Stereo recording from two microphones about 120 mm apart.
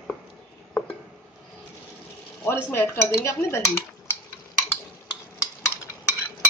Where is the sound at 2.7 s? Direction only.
20° left (ahead or behind).